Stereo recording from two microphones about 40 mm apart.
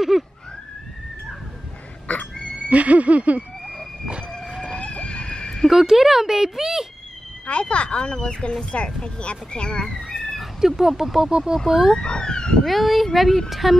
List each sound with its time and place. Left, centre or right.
0.1 s speech: centre
2.0 s fowl: left
2.7 s a sound: right
4.6 s chicken: left
5.7 s speech: centre
7.4 s speech: left; by 10.4 s centre
10.4 s speech: centre
11.9 s speech: left
12.6 s speech: centre